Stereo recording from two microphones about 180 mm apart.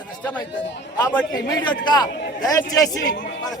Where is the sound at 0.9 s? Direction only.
20° left (ahead or behind).